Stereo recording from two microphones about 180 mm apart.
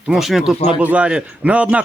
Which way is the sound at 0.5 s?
35° left (ahead or behind).